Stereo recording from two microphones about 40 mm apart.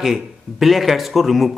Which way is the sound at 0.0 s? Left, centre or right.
Centre.